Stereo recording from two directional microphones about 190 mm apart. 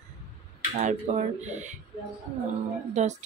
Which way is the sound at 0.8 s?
40° right (ahead or behind).